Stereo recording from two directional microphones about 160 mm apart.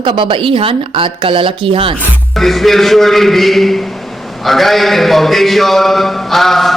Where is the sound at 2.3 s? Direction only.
Centre (ahead or behind).